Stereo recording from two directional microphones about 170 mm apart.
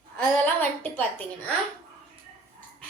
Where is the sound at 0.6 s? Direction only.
10° left (ahead or behind).